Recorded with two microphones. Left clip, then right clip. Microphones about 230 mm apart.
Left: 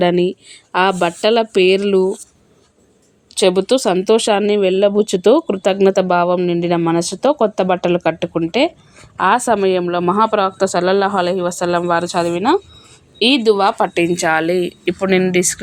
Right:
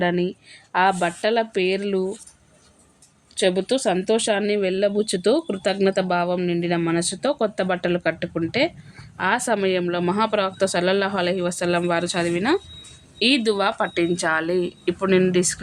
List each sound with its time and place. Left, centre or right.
0.0 s speech: left
3.3 s a woman's voice: left